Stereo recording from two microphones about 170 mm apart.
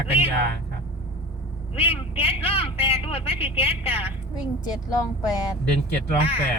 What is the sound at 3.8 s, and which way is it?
Speech, 35° left (ahead or behind).